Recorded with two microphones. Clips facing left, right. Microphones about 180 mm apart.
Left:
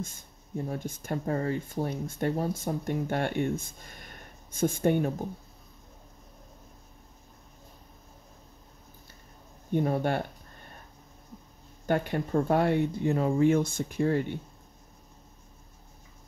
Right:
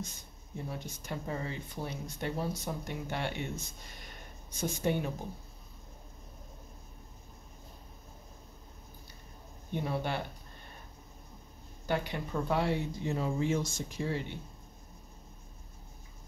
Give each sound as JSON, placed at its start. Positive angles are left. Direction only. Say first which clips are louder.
{"t": 0.7, "sound": "speech", "louder": "left 6 dB", "side_deg": 50}
{"t": 9.7, "sound": "speech", "louder": "left 7 dB", "side_deg": 50}
{"t": 11.8, "sound": "speech", "louder": "left 6 dB", "side_deg": 50}